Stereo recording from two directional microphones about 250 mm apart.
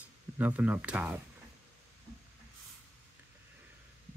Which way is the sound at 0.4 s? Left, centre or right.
Centre.